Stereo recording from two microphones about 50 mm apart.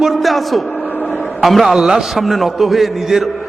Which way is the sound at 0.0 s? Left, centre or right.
Centre.